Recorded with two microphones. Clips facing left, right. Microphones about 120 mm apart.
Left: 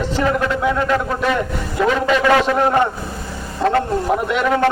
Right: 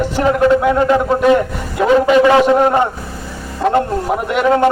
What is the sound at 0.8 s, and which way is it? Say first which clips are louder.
A man's voice: right 6 dB; 20° right (ahead or behind).